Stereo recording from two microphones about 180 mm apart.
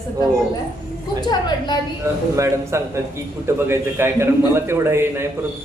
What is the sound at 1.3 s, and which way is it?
Speech, 25° left (ahead or behind).